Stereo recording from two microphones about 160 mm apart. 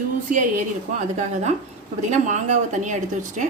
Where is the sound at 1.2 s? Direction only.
45° right (ahead or behind).